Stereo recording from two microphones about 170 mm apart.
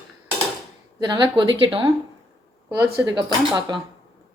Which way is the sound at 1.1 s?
25° right (ahead or behind).